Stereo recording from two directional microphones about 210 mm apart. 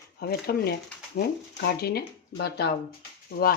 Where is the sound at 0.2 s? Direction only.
50° left (ahead or behind).